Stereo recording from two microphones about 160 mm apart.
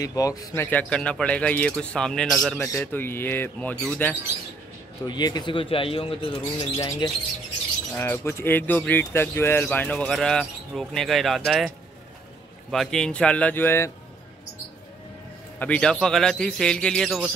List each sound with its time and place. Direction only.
0.0 s speech: 20° left (ahead or behind)
0.7 s speech: 10° left (ahead or behind)
5.0 s speech: 25° left (ahead or behind)
6.8 s speech: 20° left (ahead or behind); by 11.7 s centre (ahead or behind)
12.7 s speech: centre (ahead or behind)
15.6 s a man's voice: 5° left (ahead or behind)